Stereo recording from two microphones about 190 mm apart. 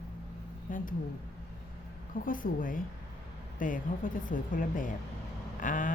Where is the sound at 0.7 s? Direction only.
45° left (ahead or behind).